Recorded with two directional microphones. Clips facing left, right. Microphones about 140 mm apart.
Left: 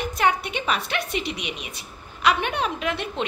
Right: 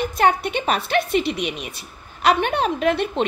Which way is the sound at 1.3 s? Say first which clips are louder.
Right 6 dB; 50° right (ahead or behind).